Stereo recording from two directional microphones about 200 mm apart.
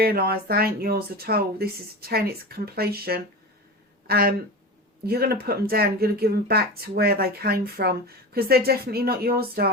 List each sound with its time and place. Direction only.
0.0 s speech: 50° right (ahead or behind)